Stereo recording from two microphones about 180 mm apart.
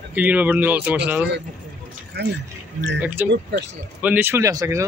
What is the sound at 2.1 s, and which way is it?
Speech, 65° right (ahead or behind).